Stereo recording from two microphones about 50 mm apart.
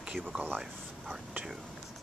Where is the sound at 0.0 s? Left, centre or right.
Centre.